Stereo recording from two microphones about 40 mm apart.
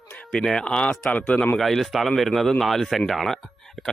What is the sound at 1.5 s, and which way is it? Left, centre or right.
Speech, centre.